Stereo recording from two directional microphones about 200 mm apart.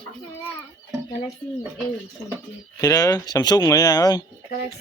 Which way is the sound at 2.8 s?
20° left (ahead or behind).